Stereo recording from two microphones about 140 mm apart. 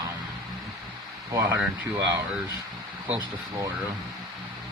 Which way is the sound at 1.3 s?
20° right (ahead or behind).